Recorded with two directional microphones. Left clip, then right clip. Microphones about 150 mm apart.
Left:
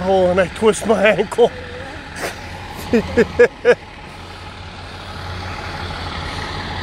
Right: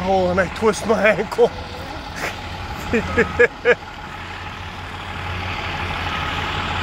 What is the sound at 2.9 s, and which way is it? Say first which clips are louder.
Speech: left 3 dB; 90° left.